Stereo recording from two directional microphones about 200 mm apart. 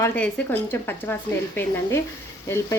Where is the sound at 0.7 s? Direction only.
10° left (ahead or behind).